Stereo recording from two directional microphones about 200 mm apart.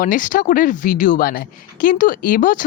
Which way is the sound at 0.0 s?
40° left (ahead or behind).